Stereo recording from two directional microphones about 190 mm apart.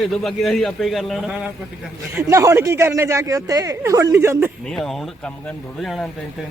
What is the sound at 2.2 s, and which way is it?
Speech, 15° right (ahead or behind).